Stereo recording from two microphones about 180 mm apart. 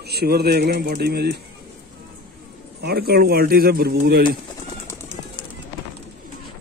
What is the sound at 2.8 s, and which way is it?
Speech, 60° right (ahead or behind).